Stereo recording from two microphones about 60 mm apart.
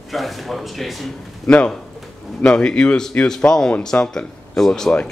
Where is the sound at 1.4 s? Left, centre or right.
Centre.